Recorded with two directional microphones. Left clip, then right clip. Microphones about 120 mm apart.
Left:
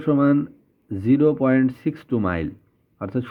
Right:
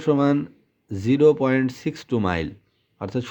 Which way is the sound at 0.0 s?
20° right (ahead or behind).